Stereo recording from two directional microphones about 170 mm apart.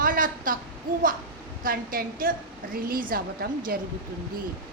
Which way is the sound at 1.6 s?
60° right (ahead or behind).